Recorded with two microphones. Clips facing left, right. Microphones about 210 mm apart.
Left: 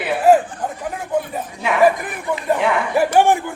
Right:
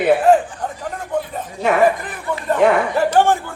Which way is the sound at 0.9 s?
5° left (ahead or behind).